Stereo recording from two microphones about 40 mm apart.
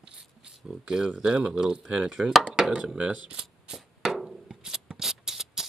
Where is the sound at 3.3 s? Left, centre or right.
Right.